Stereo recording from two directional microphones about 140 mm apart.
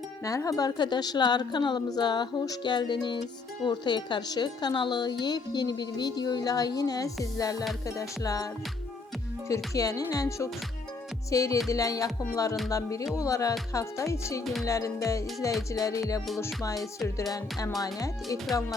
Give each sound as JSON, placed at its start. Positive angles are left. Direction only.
{"t": 0.3, "sound": "speech", "side_deg": 25}
{"t": 9.7, "sound": "speech", "side_deg": 25}
{"t": 17.7, "sound": "speech", "side_deg": 25}